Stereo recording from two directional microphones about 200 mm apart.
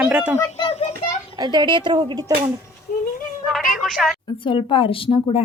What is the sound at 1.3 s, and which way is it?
Speech, 20° right (ahead or behind).